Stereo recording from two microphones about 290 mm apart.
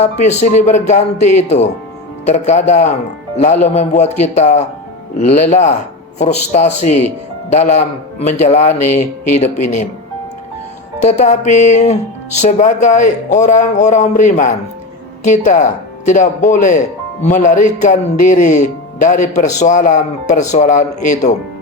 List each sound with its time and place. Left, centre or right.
0.0 s speech: left
7.5 s speech: left
11.0 s speech: left